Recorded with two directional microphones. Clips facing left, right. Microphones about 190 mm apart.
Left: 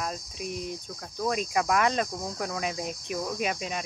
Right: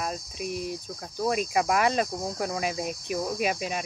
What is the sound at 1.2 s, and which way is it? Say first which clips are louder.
Cricket: right 2 dB; 10° right (ahead or behind).